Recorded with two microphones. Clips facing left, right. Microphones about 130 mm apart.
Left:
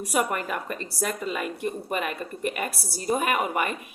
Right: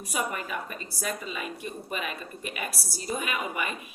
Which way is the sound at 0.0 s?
60° left (ahead or behind).